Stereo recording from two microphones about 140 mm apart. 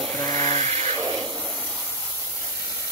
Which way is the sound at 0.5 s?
50° right (ahead or behind).